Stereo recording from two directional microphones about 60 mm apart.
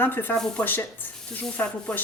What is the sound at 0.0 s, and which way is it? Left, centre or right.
Speech, left.